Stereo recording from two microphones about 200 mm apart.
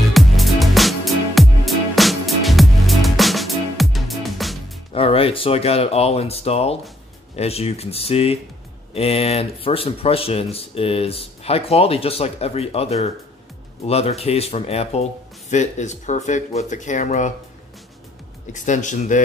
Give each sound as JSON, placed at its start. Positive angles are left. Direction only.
{"t": 0.1, "sound": "music", "side_deg": 0}
{"t": 4.9, "sound": "speech", "side_deg": 30}
{"t": 18.5, "sound": "speech", "side_deg": 40}